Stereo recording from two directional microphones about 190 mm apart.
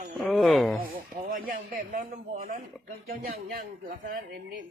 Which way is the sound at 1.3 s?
45° right (ahead or behind).